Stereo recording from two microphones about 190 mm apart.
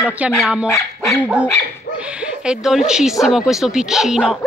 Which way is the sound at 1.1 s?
5° right (ahead or behind).